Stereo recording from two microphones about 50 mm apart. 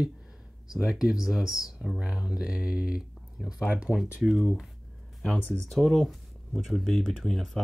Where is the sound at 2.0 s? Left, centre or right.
Centre.